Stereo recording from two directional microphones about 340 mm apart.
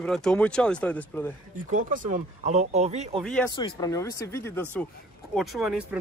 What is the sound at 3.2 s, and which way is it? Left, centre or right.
Speech, centre.